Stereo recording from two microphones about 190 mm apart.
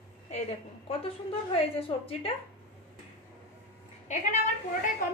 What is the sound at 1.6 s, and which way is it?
Speech, 30° left (ahead or behind).